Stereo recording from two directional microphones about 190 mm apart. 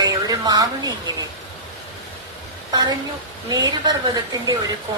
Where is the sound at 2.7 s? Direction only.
20° right (ahead or behind).